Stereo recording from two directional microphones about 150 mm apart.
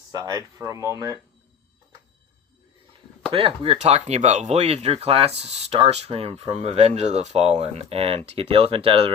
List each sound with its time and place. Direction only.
0.1 s speech: 25° right (ahead or behind)
3.3 s speech: 35° right (ahead or behind)